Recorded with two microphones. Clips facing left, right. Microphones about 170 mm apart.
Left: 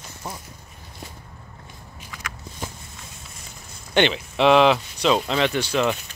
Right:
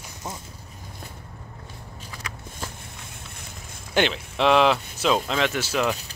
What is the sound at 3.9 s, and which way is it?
Speech, centre (ahead or behind).